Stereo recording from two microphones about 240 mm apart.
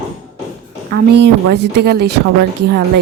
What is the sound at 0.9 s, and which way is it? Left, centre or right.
Speech, right.